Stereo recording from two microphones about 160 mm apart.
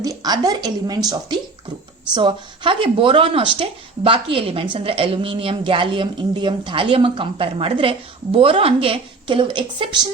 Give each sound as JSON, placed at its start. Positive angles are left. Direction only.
{"t": 0.0, "sound": "a woman's voice", "side_deg": -25}